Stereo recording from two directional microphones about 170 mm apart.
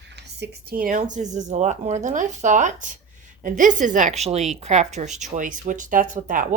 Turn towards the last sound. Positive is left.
turn(degrees=-50)  # may be behind; listen again after turning